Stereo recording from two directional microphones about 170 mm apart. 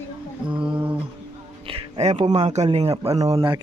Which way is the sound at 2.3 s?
40° right (ahead or behind).